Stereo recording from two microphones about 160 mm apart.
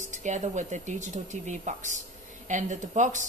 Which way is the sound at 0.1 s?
50° right (ahead or behind).